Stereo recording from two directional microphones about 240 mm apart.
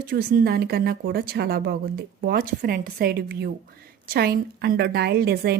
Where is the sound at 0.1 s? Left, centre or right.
Right.